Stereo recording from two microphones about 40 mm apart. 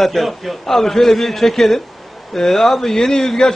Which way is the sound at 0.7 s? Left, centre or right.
Centre.